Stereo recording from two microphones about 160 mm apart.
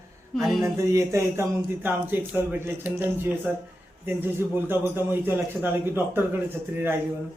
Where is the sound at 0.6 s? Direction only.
20° right (ahead or behind).